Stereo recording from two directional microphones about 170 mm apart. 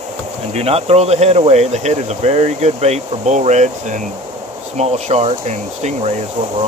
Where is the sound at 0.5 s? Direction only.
35° right (ahead or behind).